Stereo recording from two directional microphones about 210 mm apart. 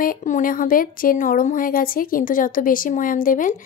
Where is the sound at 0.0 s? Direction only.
40° left (ahead or behind).